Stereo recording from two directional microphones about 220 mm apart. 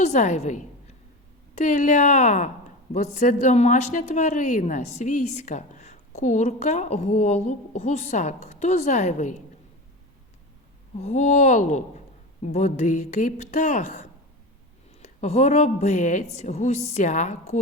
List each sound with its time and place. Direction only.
0.0 s speech: 30° left (ahead or behind)
1.6 s speech: 35° left (ahead or behind)
10.9 s speech: 30° left (ahead or behind)
15.2 s speech: 30° left (ahead or behind)